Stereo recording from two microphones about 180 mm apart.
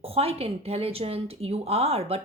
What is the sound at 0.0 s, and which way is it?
Speech, 35° right (ahead or behind).